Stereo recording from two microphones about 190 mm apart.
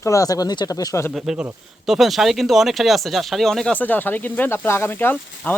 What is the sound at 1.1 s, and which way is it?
Speech, centre (ahead or behind).